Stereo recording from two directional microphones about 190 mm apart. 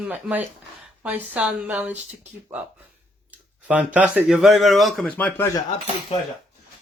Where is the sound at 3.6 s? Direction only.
5° right (ahead or behind); by 5.5 s 10° left (ahead or behind).